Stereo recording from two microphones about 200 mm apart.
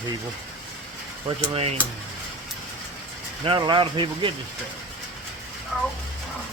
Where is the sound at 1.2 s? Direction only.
25° right (ahead or behind).